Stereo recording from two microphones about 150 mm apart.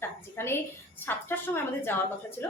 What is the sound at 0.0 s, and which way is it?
A woman's voice, 15° left (ahead or behind).